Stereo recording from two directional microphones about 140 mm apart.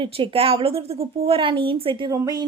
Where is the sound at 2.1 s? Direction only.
30° right (ahead or behind).